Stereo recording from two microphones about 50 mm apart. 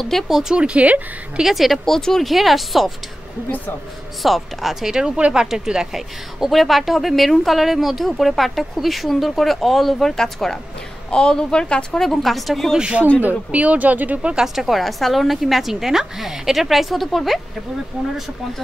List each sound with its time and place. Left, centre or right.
0.3 s speech: centre
0.6 s speech: right
1.4 s speech: centre
2.0 s speech: centre
2.2 s speech: centre
4.2 s speech: centre
12.0 s speech: centre
12.7 s speech: centre
13.5 s speech: right
14.3 s speech: centre